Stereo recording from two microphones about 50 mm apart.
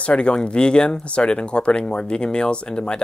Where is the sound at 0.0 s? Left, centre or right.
Left.